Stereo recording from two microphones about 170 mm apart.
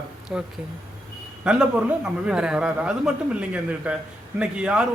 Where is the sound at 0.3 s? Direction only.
5° right (ahead or behind).